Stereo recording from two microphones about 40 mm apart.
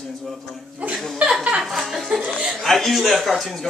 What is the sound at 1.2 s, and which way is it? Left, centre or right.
Speech, right.